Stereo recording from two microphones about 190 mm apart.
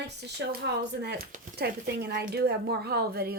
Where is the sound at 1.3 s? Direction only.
50° right (ahead or behind).